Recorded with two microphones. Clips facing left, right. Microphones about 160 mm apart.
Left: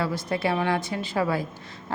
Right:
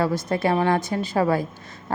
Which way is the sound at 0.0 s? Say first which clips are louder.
Right 4 dB; 45° right (ahead or behind).